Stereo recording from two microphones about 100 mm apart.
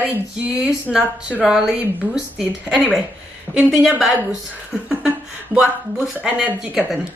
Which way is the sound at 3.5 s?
15° left (ahead or behind).